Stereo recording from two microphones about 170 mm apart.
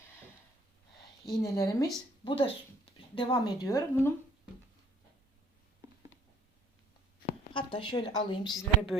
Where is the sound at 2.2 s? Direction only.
30° left (ahead or behind).